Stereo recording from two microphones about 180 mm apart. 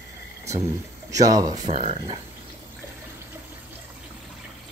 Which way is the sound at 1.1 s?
20° right (ahead or behind).